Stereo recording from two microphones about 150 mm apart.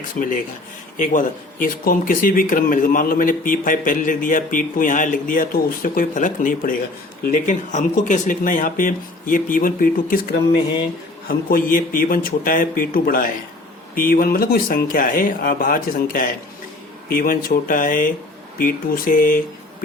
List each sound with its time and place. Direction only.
0.9 s speech: 60° left (ahead or behind)
11.3 s speech: 75° left (ahead or behind)